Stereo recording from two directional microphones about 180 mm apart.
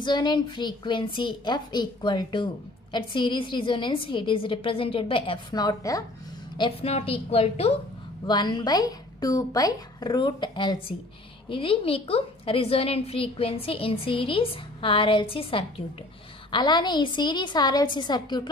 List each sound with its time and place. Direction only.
0.0 s a woman's voice: 25° left (ahead or behind)
6.6 s a woman's voice: 35° left (ahead or behind)
8.3 s a woman's voice: 25° left (ahead or behind)